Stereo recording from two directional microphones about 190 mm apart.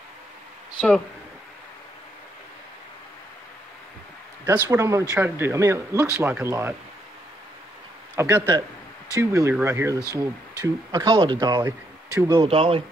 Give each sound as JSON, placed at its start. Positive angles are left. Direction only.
{"t": 0.7, "sound": "speech", "side_deg": 0}
{"t": 4.6, "sound": "speech", "side_deg": -15}
{"t": 8.2, "sound": "speech", "side_deg": -15}